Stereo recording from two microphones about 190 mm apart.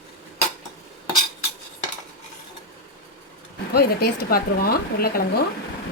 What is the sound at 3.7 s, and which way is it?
Speech, 55° left (ahead or behind).